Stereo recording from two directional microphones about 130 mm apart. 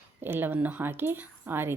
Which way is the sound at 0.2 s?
15° right (ahead or behind).